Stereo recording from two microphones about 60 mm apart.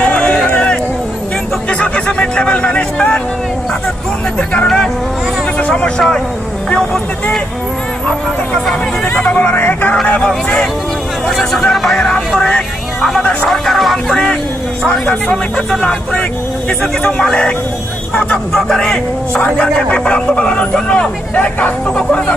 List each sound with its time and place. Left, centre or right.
0.0 s a sound: left
5.7 s speech: centre
9.1 s speech: left
11.2 s speech: centre
12.4 s vehicle: centre
13.2 s speech: left
13.5 s speech: centre
14.8 s a man's voice: centre
17.2 s a man's voice: centre